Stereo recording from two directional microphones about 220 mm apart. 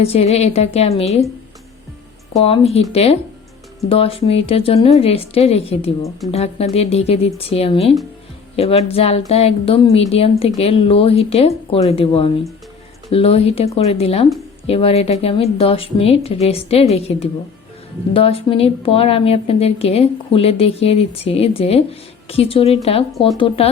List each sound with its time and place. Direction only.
0.0 s a woman's voice: 30° left (ahead or behind)
2.4 s a woman's voice: 25° left (ahead or behind)